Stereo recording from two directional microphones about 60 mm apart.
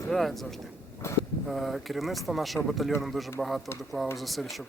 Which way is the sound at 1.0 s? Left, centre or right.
Left.